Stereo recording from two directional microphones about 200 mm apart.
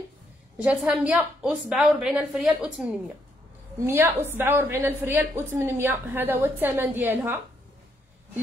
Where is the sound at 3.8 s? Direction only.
10° right (ahead or behind).